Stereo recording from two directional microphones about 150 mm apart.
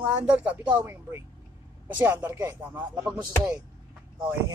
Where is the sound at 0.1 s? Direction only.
10° right (ahead or behind).